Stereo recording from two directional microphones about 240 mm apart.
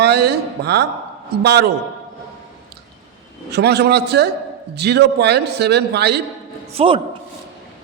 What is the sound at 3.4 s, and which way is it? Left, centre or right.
A man's voice, right.